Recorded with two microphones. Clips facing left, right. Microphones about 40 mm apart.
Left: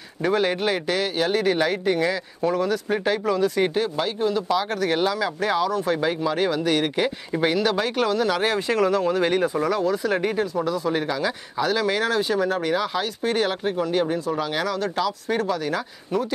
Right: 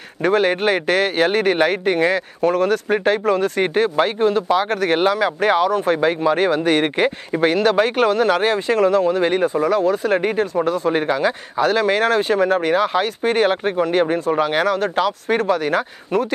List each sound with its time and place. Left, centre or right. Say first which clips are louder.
0.2 s speech: right 5 dB; right
2.9 s speech: right 5 dB; right
9.8 s speech: right 5 dB; right